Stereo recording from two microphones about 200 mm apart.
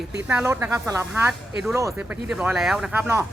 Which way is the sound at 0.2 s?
10° right (ahead or behind).